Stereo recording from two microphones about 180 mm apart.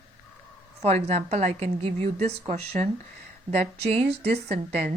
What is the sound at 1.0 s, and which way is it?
A woman's voice, 40° right (ahead or behind).